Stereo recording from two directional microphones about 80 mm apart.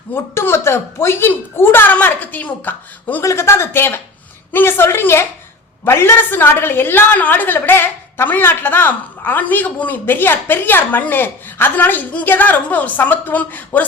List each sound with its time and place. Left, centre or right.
0.1 s a woman's voice: left
3.2 s a woman's voice: left